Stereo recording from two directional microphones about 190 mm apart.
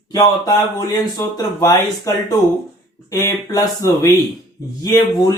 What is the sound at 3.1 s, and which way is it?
Speech, 15° left (ahead or behind).